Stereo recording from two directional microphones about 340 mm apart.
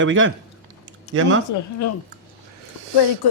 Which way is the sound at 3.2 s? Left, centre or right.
Left.